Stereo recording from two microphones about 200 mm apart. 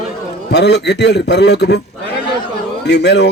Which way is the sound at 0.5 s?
60° left (ahead or behind).